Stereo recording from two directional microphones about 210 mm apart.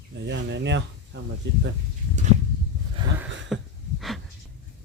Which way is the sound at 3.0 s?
20° right (ahead or behind).